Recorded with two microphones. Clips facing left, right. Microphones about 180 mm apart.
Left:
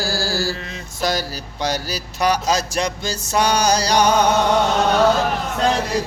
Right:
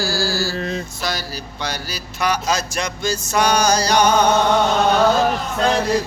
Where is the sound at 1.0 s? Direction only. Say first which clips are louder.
Left 4 dB; 45° left (ahead or behind).